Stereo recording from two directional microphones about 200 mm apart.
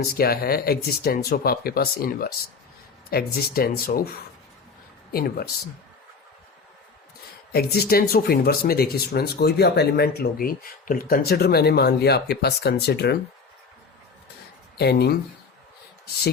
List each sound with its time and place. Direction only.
0.1 s speech: 50° left (ahead or behind)
5.1 s speech: 50° left (ahead or behind)
7.5 s speech: 50° left (ahead or behind)
14.8 s speech: 55° left (ahead or behind)